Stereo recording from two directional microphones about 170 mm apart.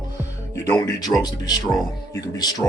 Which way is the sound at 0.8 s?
20° left (ahead or behind).